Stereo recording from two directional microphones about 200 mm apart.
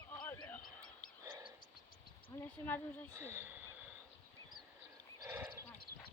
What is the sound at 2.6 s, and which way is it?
Speech, 10° left (ahead or behind).